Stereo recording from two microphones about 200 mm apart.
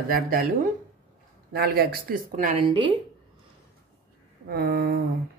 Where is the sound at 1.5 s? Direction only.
50° right (ahead or behind).